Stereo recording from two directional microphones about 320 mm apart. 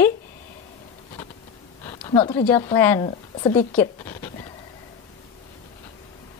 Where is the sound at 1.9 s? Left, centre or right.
Centre.